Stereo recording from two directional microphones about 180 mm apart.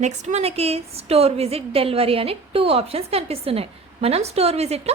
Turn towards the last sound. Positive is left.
turn(degrees=-35)  # may be behind; listen again after turning